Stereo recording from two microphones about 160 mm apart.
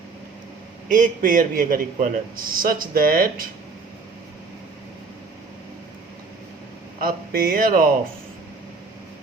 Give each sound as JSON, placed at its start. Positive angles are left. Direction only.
{"t": 0.9, "sound": "a man's voice", "side_deg": -55}
{"t": 7.0, "sound": "a man's voice", "side_deg": -65}